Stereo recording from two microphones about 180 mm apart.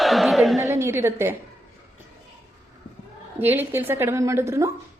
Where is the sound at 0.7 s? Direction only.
15° right (ahead or behind).